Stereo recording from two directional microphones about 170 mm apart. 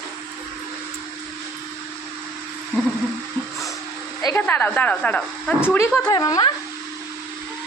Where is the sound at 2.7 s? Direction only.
5° left (ahead or behind).